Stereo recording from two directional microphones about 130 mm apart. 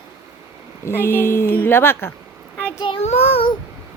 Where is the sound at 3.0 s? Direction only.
55° left (ahead or behind).